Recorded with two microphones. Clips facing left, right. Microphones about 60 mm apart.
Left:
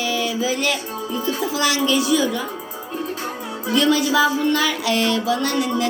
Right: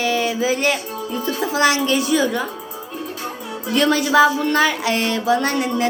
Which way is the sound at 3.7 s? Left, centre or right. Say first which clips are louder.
Right 2 dB; right.